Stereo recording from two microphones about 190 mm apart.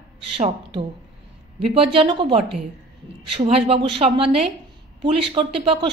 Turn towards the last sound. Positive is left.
turn(degrees=-25)  # may be behind; listen again after turning